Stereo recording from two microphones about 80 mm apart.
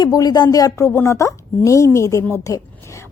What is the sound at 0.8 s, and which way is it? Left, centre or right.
A woman's voice, left.